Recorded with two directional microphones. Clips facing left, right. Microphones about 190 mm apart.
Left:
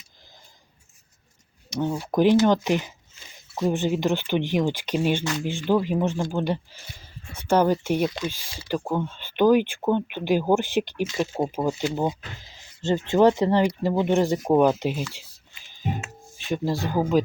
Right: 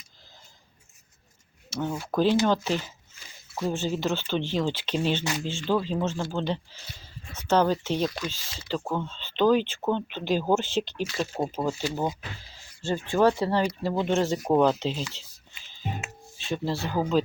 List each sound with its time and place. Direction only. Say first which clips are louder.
2.0 s speech: left 4 dB; 15° left (ahead or behind)
16.4 s speech: left 3 dB; 15° left (ahead or behind)